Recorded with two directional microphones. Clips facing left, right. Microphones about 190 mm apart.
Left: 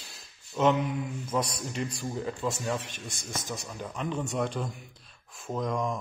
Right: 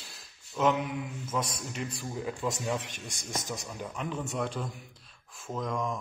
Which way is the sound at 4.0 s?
5° right (ahead or behind).